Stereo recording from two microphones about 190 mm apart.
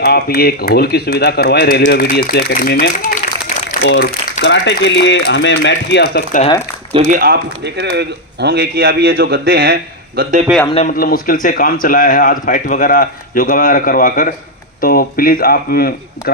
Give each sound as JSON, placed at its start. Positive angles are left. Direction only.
{"t": 0.0, "sound": "speech", "side_deg": 55}
{"t": 3.8, "sound": "speech", "side_deg": 70}
{"t": 7.1, "sound": "speech", "side_deg": -55}
{"t": 10.8, "sound": "speech", "side_deg": 50}